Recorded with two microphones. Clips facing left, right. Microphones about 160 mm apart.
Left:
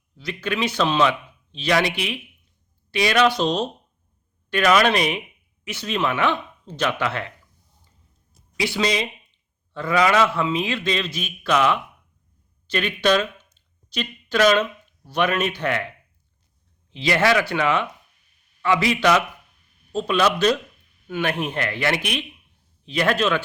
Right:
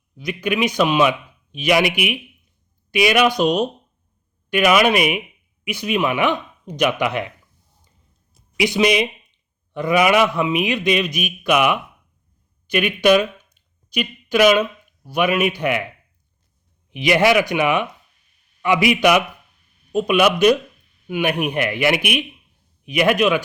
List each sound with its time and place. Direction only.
0.2 s speech: 15° right (ahead or behind)
8.5 s a man's voice: 15° right (ahead or behind)